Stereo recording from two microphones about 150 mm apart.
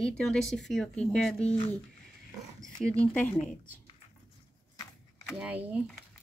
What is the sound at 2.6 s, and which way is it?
Speech, 5° left (ahead or behind).